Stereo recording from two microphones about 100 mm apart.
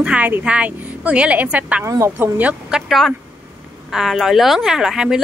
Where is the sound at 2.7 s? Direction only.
Centre (ahead or behind).